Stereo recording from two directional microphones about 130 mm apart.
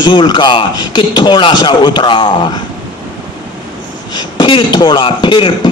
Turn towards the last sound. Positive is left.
turn(degrees=40)  # may be behind; listen again after turning